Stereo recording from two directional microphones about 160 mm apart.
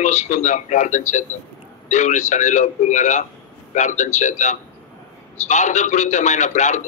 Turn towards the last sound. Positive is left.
turn(degrees=50)  # may be behind; listen again after turning